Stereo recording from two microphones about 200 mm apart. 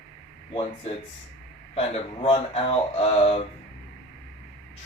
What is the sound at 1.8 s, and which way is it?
Speech, 30° left (ahead or behind).